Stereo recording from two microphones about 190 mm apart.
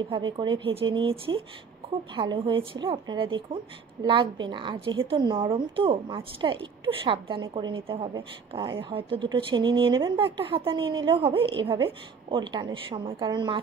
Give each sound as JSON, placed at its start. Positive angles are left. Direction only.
{"t": 0.0, "sound": "a woman's voice", "side_deg": -25}